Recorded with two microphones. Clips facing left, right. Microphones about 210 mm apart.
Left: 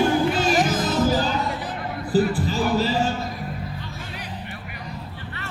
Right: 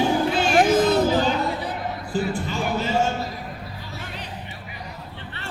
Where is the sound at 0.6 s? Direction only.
60° right (ahead or behind).